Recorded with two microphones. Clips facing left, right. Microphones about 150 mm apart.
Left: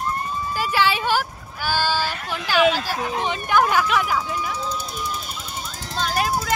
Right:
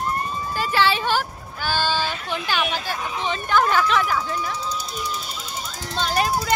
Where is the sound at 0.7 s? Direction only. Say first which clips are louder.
Even; 10° left (ahead or behind).